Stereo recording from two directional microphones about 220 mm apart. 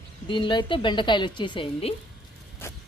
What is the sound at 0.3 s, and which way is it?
Speech, 20° left (ahead or behind).